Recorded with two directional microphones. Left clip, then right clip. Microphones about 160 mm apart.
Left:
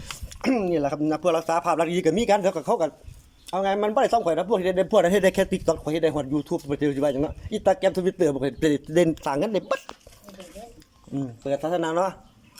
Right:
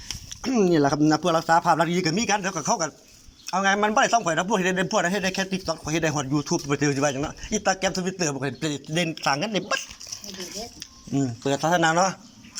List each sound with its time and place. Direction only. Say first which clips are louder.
0.3 s a man's voice: right 2 dB; 10° left (ahead or behind)
2.0 s a man's voice: left 4 dB; 35° left (ahead or behind)
5.9 s speech: right 1 dB; 20° left (ahead or behind)
6.1 s a man's voice: right 1 dB; 35° left (ahead or behind)
8.4 s a man's voice: left 5 dB; 35° left (ahead or behind)
11.1 s speech: right 2 dB; 20° left (ahead or behind)